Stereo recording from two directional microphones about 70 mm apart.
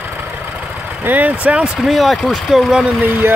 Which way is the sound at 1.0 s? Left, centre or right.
Right.